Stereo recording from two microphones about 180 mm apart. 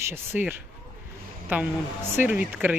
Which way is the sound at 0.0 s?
15° right (ahead or behind).